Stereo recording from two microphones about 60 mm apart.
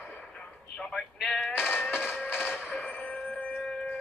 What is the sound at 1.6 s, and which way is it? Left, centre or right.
Music, left.